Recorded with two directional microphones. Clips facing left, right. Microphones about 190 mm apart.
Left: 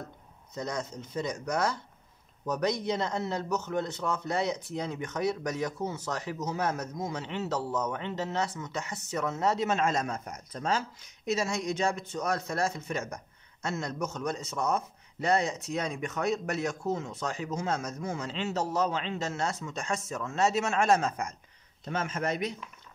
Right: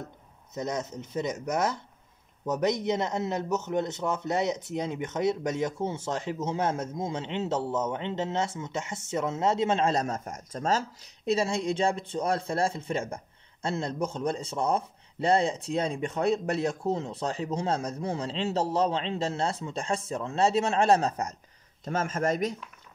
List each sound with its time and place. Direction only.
0.6 s a man's voice: 20° right (ahead or behind); by 22.6 s 45° right (ahead or behind)